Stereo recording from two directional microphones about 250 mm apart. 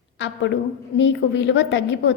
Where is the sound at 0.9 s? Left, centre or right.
Left.